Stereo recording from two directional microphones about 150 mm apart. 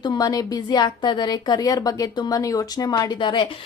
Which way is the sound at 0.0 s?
25° left (ahead or behind).